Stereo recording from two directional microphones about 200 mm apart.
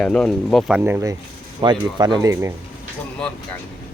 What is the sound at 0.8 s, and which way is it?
Speech, 15° right (ahead or behind).